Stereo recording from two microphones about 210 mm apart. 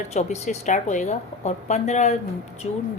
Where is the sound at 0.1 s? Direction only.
35° left (ahead or behind).